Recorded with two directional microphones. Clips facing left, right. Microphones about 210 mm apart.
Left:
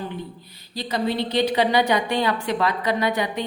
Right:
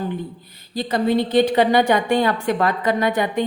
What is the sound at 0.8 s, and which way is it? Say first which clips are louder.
A woman's voice: right 5 dB; 50° right (ahead or behind).